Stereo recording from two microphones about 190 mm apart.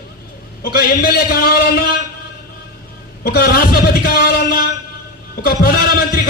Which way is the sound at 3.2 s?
55° left (ahead or behind).